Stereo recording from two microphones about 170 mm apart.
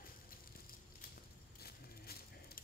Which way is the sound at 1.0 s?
65° left (ahead or behind).